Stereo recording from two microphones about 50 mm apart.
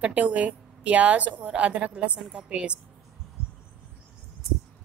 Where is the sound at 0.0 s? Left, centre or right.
Right.